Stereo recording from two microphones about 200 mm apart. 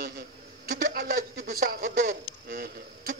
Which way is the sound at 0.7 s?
50° right (ahead or behind).